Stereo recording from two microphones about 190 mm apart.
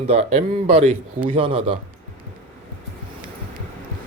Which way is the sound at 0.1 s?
35° right (ahead or behind).